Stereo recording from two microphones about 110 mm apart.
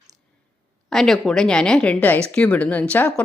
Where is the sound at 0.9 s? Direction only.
5° left (ahead or behind).